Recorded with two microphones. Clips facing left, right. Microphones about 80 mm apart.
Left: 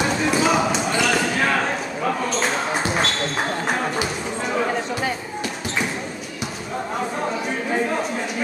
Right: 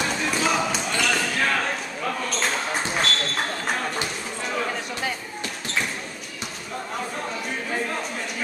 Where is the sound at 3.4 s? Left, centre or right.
Centre.